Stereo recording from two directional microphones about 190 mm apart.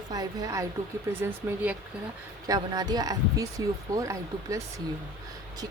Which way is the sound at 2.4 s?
20° right (ahead or behind).